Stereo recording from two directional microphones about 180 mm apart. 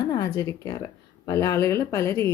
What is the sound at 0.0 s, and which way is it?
Speech, 25° left (ahead or behind).